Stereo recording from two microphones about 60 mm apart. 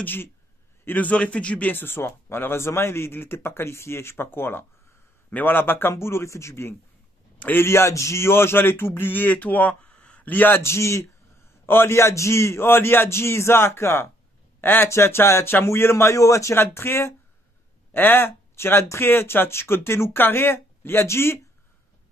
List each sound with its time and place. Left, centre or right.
0.0 s a man's voice: left; by 1.7 s centre
1.7 s a man's voice: left
10.6 s a man's voice: left
11.6 s a man's voice: left
14.6 s a man's voice: left
16.5 s a man's voice: left